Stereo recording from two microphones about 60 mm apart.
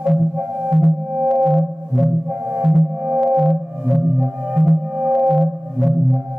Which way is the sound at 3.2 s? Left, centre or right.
Centre.